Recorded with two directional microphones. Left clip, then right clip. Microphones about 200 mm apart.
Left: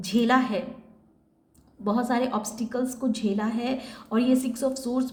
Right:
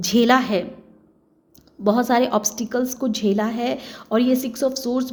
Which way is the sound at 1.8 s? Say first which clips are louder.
Right 8 dB; 40° right (ahead or behind).